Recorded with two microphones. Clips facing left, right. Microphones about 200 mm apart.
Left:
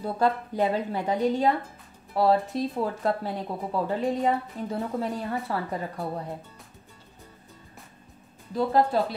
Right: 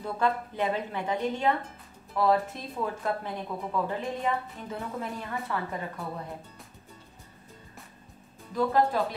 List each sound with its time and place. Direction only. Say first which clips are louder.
0.0 s speech: left 3 dB; 35° left (ahead or behind)
8.5 s speech: left 2 dB; 30° left (ahead or behind)